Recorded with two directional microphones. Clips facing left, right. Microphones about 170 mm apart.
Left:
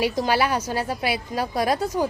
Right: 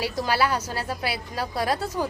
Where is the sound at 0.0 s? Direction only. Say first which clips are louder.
Left 3 dB; 20° left (ahead or behind).